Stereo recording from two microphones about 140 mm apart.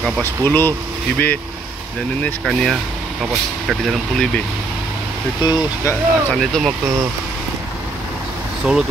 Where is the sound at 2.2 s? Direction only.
Centre (ahead or behind).